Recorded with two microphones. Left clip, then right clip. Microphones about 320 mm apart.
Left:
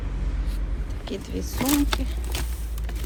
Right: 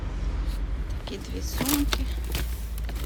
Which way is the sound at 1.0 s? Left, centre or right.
Centre.